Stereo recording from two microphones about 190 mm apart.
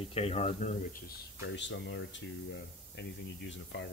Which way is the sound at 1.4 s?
75° left (ahead or behind).